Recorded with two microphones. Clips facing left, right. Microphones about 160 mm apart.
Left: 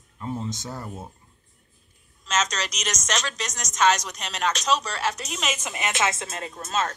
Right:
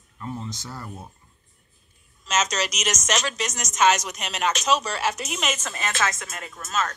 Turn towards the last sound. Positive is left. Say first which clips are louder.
# left 1 dB
turn(degrees=30)  # may be behind; listen again after turning